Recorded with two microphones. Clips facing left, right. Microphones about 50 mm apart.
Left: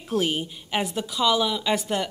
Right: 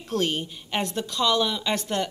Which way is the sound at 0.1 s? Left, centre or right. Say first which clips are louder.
Left 1 dB; centre.